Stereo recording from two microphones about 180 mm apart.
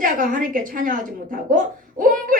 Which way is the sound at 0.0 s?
50° right (ahead or behind).